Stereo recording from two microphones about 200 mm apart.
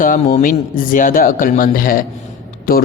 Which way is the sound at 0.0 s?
45° left (ahead or behind).